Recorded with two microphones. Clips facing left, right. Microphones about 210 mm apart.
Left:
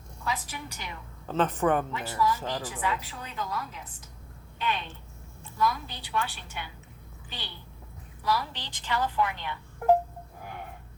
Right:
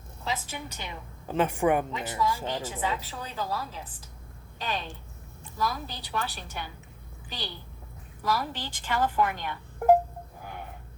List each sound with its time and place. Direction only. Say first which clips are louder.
0.3 s a woman's voice: right 1 dB; 25° right (ahead or behind)
1.4 s a woman's voice: right 1 dB; 10° right (ahead or behind); by 9.9 s 45° right (ahead or behind)